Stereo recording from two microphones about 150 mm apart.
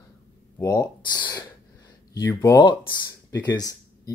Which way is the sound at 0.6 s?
25° left (ahead or behind).